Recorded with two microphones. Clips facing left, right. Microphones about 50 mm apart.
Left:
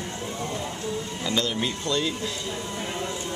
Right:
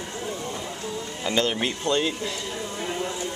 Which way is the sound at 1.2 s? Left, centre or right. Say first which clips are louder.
Right 3 dB; right.